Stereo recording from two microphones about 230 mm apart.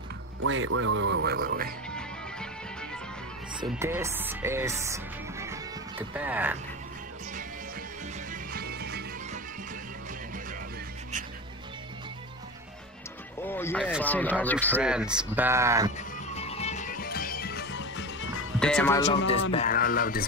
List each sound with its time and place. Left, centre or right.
0.4 s speech: right
2.0 s music: centre
3.8 s speech: centre
8.3 s music: right
13.5 s speech: centre
14.7 s speech: centre
16.0 s music: left
18.6 s speech: centre
19.5 s music: left